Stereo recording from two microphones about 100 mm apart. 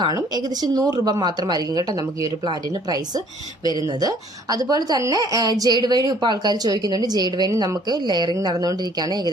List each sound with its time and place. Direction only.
0.6 s a woman's voice: 40° right (ahead or behind)
4.0 s a woman's voice: 40° right (ahead or behind)